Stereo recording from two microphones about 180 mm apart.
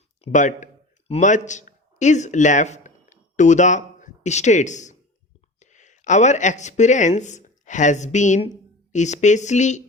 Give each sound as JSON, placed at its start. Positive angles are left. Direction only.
{"t": 0.3, "sound": "a man's voice", "side_deg": 45}